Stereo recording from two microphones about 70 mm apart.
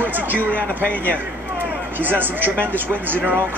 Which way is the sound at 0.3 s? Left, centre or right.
Left.